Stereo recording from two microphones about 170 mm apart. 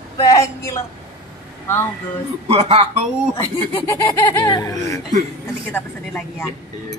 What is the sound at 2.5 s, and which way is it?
Speech, 35° right (ahead or behind).